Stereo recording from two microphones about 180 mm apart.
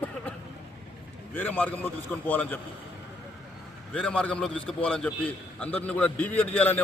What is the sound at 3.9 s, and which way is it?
A man's voice, 5° left (ahead or behind).